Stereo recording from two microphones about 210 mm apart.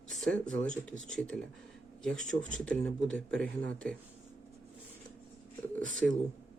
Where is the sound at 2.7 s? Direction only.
5° left (ahead or behind).